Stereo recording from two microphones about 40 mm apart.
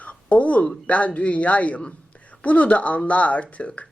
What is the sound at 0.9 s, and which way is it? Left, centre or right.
A man's voice, left.